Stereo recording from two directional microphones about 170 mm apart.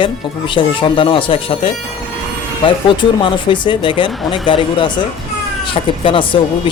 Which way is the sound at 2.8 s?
30° left (ahead or behind).